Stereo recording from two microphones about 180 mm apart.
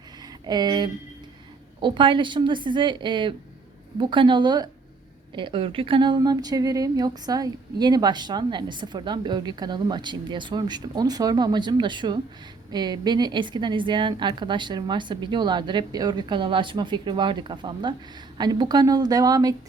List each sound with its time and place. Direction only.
0.4 s a woman's voice: 25° right (ahead or behind)